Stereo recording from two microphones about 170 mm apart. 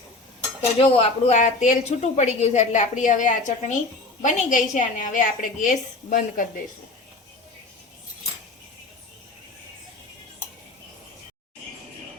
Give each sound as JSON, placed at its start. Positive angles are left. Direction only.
{"t": 0.8, "sound": "a woman's voice", "side_deg": 35}